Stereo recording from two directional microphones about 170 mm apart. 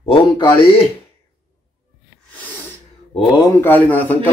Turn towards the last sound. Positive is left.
turn(degrees=10)  # may be behind; listen again after turning